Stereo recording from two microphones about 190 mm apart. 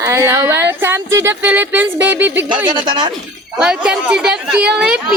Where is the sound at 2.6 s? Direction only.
25° right (ahead or behind).